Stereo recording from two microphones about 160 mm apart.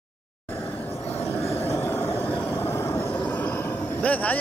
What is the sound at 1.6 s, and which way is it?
Vehicle, 15° left (ahead or behind).